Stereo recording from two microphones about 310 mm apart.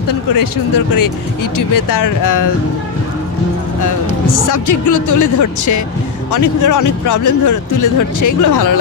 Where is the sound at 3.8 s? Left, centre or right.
Left.